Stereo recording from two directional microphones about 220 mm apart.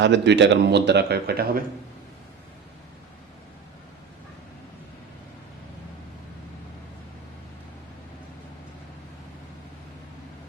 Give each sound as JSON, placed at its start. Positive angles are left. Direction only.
{"t": 0.0, "sound": "a man's voice", "side_deg": -55}